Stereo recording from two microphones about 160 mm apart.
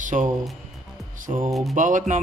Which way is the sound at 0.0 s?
50° right (ahead or behind).